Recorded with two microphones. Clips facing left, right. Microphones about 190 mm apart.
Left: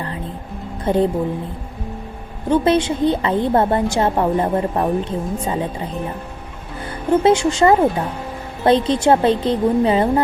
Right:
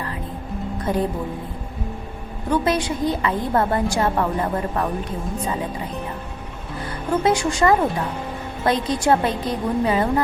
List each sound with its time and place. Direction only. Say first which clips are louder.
0.9 s a woman's voice: left 5 dB; 25° left (ahead or behind)
2.5 s a woman's voice: left 5 dB; 25° left (ahead or behind)
7.1 s a woman's voice: left 5 dB; 25° left (ahead or behind)